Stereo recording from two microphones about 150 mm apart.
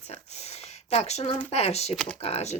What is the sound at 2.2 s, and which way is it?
Speech, 45° left (ahead or behind).